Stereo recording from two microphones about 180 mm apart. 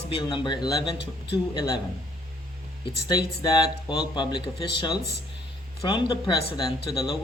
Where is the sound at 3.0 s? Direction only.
20° left (ahead or behind).